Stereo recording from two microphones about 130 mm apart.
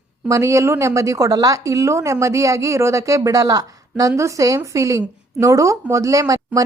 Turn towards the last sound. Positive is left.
turn(degrees=-25)  # may be behind; listen again after turning